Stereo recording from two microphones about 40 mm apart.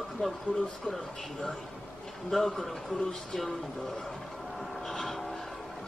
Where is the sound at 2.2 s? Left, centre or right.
Centre.